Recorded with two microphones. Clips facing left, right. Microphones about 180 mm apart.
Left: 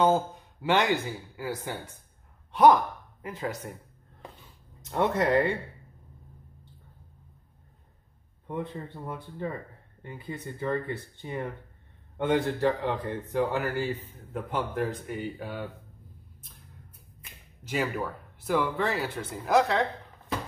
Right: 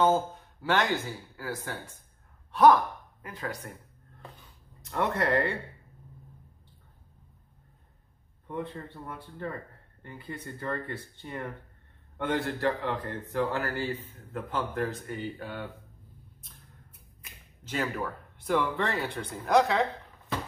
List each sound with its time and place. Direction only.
0.0 s speech: 15° left (ahead or behind)
4.8 s speech: 15° left (ahead or behind)
8.5 s speech: 15° left (ahead or behind)
17.6 s speech: 5° left (ahead or behind)